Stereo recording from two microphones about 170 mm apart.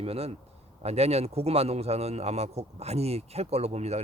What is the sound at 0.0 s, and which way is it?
A man's voice, 35° right (ahead or behind).